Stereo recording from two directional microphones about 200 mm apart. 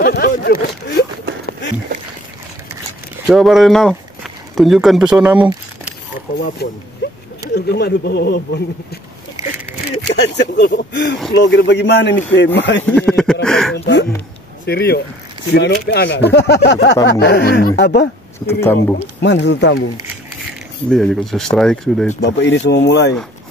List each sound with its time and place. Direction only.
0.0 s a sound: 50° left (ahead or behind)
3.3 s speech: centre (ahead or behind)
6.6 s speech: 50° left (ahead or behind)
7.0 s a sound: 60° left (ahead or behind)
7.5 s speech: 55° left (ahead or behind)
9.4 s a sound: 15° right (ahead or behind)
10.0 s speech: 60° left (ahead or behind)
12.8 s speech: 5° left (ahead or behind)
13.7 s speech: 60° left (ahead or behind)
18.5 s speech: 10° left (ahead or behind)
18.9 s speech: 60° left (ahead or behind)
20.9 s speech: centre (ahead or behind)
22.2 s speech: 60° left (ahead or behind)